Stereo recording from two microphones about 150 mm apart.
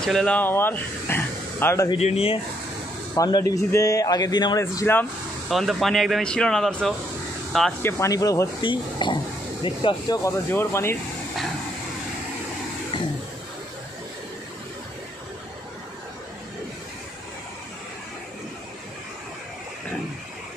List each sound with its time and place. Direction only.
0.0 s speech: 5° left (ahead or behind)
1.9 s speech: 40° left (ahead or behind)
3.2 s speech: 25° left (ahead or behind)
5.5 s speech: centre (ahead or behind)
7.8 s speech: 20° left (ahead or behind)